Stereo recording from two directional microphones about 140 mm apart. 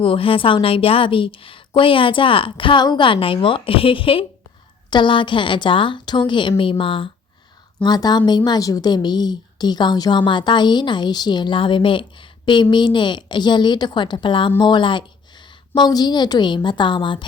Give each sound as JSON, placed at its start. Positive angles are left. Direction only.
{"t": 0.0, "sound": "a woman's voice", "side_deg": 40}